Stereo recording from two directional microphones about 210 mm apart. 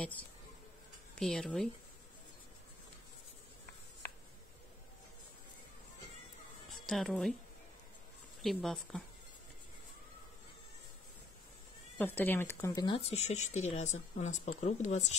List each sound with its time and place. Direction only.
1.2 s speech: centre (ahead or behind)
6.9 s speech: centre (ahead or behind)
8.4 s speech: centre (ahead or behind)
12.0 s speech: 10° left (ahead or behind); by 15.1 s 35° left (ahead or behind)